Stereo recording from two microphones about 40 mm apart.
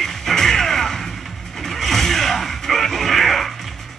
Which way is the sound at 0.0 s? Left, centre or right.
Centre.